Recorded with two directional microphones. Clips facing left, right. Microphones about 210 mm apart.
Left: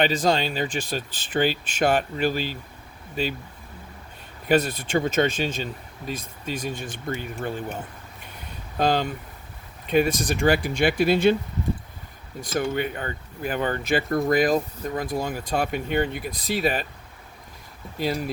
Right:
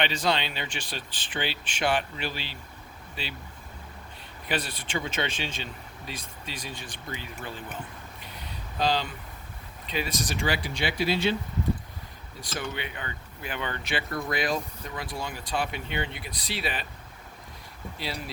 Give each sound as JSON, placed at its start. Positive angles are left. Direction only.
{"t": 0.0, "sound": "speech", "side_deg": 45}
{"t": 4.4, "sound": "speech", "side_deg": 45}
{"t": 8.8, "sound": "speech", "side_deg": 50}
{"t": 12.5, "sound": "speech", "side_deg": 45}
{"t": 17.9, "sound": "speech", "side_deg": 45}